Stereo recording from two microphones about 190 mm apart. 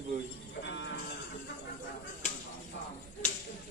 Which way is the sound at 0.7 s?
75° left (ahead or behind).